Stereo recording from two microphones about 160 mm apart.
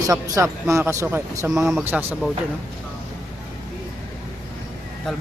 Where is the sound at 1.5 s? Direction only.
Centre (ahead or behind).